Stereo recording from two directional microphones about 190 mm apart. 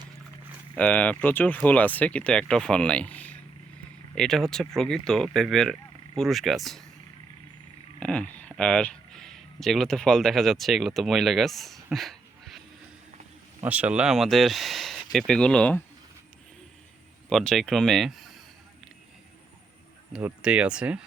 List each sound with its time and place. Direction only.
0.8 s speech: 5° left (ahead or behind)
7.9 s speech: 5° left (ahead or behind)
13.6 s speech: 10° right (ahead or behind)
17.2 s speech: 5° left (ahead or behind)
20.1 s speech: 5° right (ahead or behind)